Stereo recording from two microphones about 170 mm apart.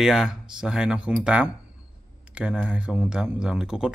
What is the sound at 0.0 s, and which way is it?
Speech, 5° right (ahead or behind).